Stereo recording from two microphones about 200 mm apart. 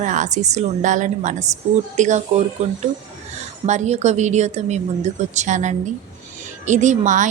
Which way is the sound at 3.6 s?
35° right (ahead or behind).